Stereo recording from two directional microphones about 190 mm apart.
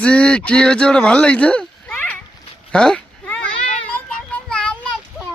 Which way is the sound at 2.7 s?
5° left (ahead or behind).